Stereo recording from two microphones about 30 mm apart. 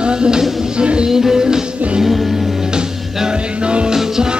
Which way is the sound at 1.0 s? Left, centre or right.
Centre.